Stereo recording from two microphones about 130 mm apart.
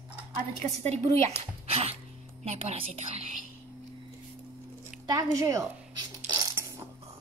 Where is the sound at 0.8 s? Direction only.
55° right (ahead or behind).